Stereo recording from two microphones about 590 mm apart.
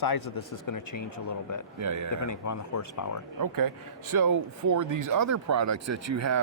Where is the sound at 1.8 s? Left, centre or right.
Right.